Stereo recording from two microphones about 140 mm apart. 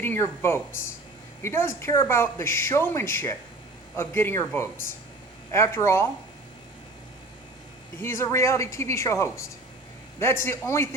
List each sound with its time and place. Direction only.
0.0 s speech: 15° left (ahead or behind)
8.0 s speech: 20° left (ahead or behind)